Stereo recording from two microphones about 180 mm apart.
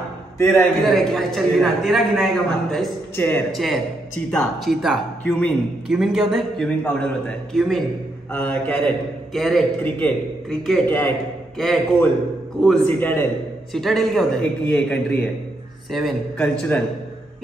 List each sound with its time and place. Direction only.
0.4 s a man's voice: 15° left (ahead or behind)
0.8 s speech: centre (ahead or behind)
3.2 s a man's voice: 10° left (ahead or behind)
3.5 s a man's voice: centre (ahead or behind)